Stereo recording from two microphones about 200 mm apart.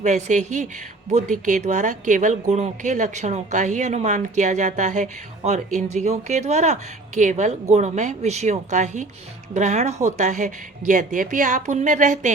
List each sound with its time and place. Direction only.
0.0 s a woman's voice: 35° right (ahead or behind)